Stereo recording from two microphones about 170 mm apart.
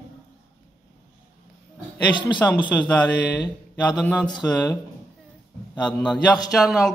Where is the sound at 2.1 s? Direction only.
25° left (ahead or behind).